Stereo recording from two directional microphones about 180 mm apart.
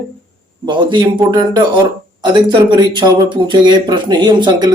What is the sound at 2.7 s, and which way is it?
Speech, 25° right (ahead or behind).